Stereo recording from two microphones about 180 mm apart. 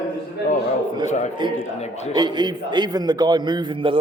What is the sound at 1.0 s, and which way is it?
Speech, 40° left (ahead or behind).